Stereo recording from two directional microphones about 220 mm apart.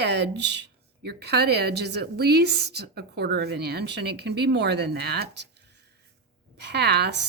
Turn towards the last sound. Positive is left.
turn(degrees=-50)  # may be behind; listen again after turning